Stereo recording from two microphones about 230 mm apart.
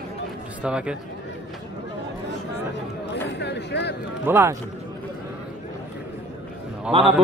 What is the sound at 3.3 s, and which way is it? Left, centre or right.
Speech, left.